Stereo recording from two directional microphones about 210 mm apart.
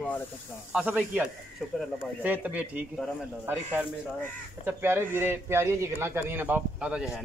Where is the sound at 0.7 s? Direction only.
5° right (ahead or behind).